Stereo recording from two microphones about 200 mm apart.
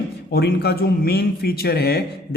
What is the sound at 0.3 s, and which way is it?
Speech, 55° left (ahead or behind).